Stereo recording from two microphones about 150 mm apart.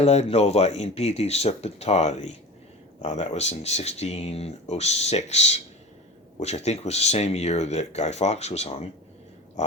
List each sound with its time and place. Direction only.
0.0 s speech: 45° left (ahead or behind)